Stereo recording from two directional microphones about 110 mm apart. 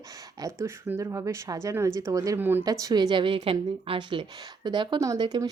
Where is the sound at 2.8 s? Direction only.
40° right (ahead or behind).